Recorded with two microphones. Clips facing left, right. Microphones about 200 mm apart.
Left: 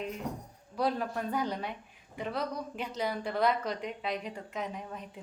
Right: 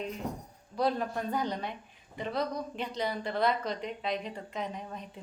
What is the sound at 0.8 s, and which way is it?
Speech, 5° left (ahead or behind).